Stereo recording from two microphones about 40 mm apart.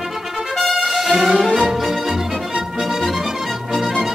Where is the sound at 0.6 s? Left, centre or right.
Centre.